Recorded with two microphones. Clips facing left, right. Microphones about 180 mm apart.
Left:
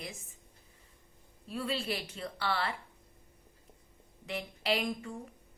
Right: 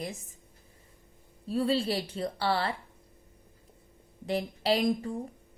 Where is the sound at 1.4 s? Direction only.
35° right (ahead or behind).